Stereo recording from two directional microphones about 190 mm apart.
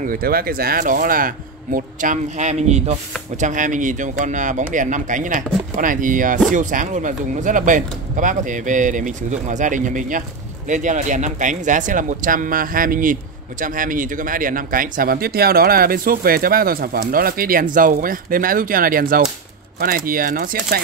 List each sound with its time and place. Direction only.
0.0 s speech: 50° right (ahead or behind)